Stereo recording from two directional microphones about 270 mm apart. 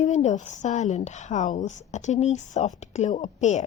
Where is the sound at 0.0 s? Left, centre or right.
Left.